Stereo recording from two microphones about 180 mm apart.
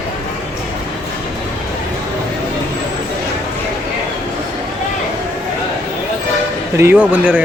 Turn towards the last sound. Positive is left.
turn(degrees=-10)  # may be behind; listen again after turning